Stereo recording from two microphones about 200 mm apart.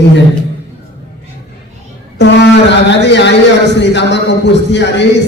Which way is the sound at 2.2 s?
60° left (ahead or behind).